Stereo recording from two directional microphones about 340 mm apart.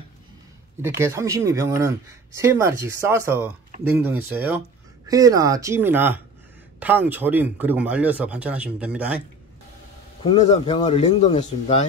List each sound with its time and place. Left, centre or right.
0.8 s speech: centre
10.2 s a man's voice: centre